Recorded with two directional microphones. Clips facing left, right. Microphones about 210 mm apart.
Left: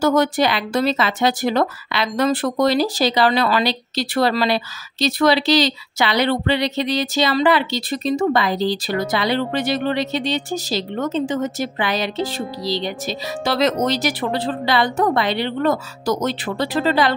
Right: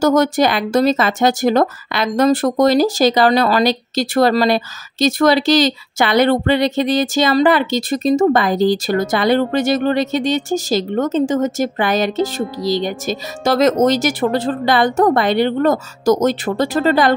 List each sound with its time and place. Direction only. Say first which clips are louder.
0.0 s speech: right 3 dB; 45° right (ahead or behind)